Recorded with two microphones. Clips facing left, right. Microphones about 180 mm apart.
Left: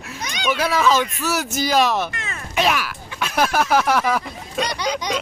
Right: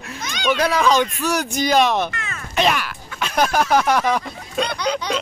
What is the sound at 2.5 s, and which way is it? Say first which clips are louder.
Speech: right 1 dB; 5° left (ahead or behind).